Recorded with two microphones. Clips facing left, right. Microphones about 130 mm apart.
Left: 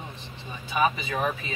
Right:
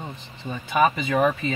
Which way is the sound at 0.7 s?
60° right (ahead or behind).